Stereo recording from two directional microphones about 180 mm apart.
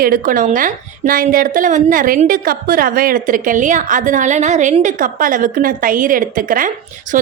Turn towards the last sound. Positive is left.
turn(degrees=-45)  # may be behind; listen again after turning